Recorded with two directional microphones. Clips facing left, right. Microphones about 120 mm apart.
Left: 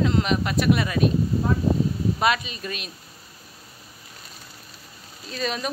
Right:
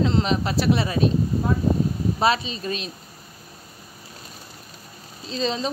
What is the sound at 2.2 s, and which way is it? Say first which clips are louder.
Speech: right 3 dB; 30° right (ahead or behind).